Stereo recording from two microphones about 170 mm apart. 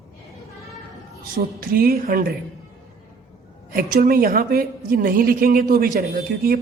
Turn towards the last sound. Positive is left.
turn(degrees=-60)  # may be behind; listen again after turning